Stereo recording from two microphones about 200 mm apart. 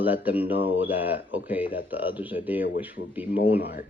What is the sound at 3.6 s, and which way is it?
Speech, 55° left (ahead or behind).